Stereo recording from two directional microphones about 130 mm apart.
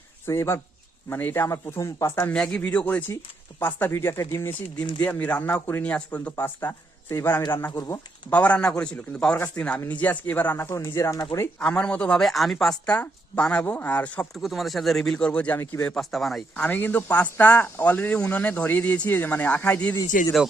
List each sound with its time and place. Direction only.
0.3 s speech: 20° left (ahead or behind)
2.3 s a man's voice: 10° left (ahead or behind); by 7.9 s 25° left (ahead or behind)
8.3 s a man's voice: 10° left (ahead or behind); by 11.4 s 30° left (ahead or behind)
11.6 s a man's voice: 10° left (ahead or behind)
14.3 s speech: centre (ahead or behind)
16.0 s speech: centre (ahead or behind)
16.6 s a man's voice: 15° left (ahead or behind)